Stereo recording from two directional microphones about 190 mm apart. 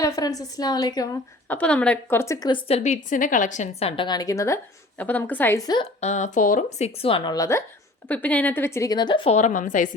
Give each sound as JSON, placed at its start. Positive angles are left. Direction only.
{"t": 0.0, "sound": "a woman's voice", "side_deg": 20}
{"t": 1.5, "sound": "a woman's voice", "side_deg": 5}
{"t": 2.6, "sound": "a woman's voice", "side_deg": 35}
{"t": 6.0, "sound": "a woman's voice", "side_deg": 35}